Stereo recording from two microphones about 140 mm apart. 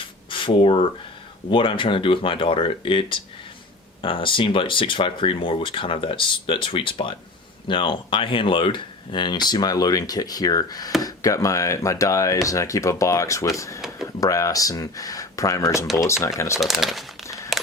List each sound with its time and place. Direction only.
0.3 s speech: 35° left (ahead or behind)
16.6 s speech: centre (ahead or behind)
17.5 s a sound: centre (ahead or behind)